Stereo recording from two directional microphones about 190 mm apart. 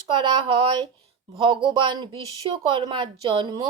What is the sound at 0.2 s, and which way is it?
Speech, 25° right (ahead or behind).